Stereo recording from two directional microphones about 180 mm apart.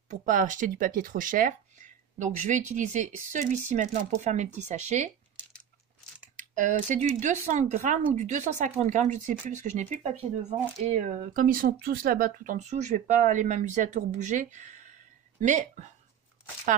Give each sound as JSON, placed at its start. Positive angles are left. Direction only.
{"t": 0.1, "sound": "speech", "side_deg": -45}
{"t": 6.3, "sound": "speech", "side_deg": -45}